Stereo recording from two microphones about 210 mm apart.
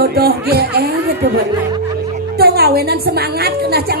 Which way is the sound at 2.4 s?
50° right (ahead or behind).